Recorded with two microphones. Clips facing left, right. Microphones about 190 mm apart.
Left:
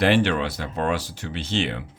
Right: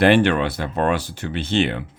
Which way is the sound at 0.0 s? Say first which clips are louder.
Right 4 dB; 55° right (ahead or behind).